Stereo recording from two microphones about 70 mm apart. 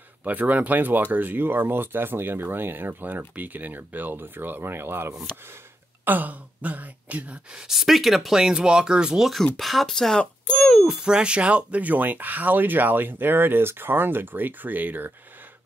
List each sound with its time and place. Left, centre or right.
0.2 s speech: right
7.6 s speech: centre
9.6 s speech: centre
10.8 s speech: centre; by 15.1 s right